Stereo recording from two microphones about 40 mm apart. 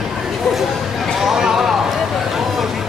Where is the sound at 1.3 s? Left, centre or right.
Centre.